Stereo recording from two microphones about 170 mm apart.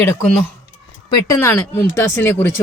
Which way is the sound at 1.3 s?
15° left (ahead or behind).